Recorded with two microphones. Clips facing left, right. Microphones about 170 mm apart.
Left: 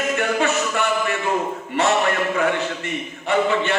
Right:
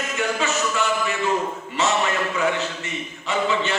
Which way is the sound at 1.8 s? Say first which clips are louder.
Left 3 dB; 60° left (ahead or behind).